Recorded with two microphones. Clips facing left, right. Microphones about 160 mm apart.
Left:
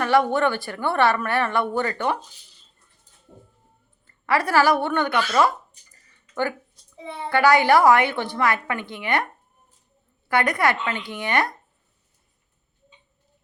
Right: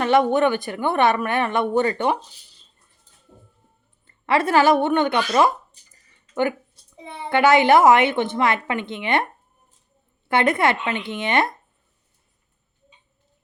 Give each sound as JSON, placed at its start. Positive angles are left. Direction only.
{"t": 0.0, "sound": "a woman's voice", "side_deg": -20}
{"t": 4.0, "sound": "a woman's voice", "side_deg": -20}
{"t": 6.9, "sound": "a woman's voice", "side_deg": -20}
{"t": 10.2, "sound": "a woman's voice", "side_deg": -25}